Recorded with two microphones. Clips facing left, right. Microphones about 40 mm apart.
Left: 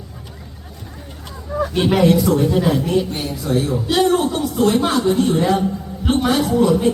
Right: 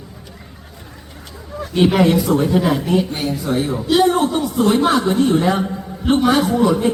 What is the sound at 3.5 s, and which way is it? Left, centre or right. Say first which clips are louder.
Speech: left 3 dB; right.